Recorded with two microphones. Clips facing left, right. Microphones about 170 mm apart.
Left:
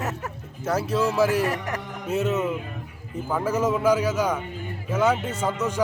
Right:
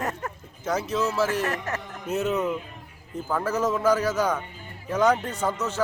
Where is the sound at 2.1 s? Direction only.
5° left (ahead or behind).